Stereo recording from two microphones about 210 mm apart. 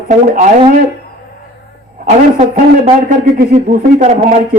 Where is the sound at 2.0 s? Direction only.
40° right (ahead or behind).